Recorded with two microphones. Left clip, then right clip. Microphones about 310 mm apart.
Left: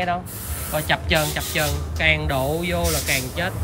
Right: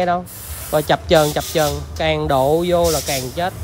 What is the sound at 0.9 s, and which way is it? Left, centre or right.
Speech, centre.